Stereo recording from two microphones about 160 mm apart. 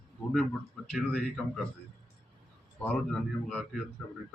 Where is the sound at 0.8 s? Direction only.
5° left (ahead or behind).